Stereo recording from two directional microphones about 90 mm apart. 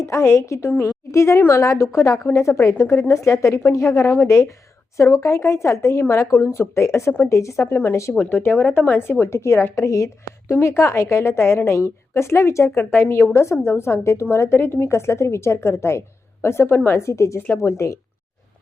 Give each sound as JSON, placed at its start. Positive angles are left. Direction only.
{"t": 0.0, "sound": "a woman's voice", "side_deg": 30}
{"t": 8.1, "sound": "a woman's voice", "side_deg": 15}